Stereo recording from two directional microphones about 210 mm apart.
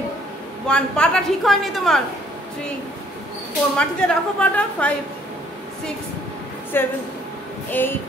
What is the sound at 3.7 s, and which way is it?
A woman's voice, 5° left (ahead or behind).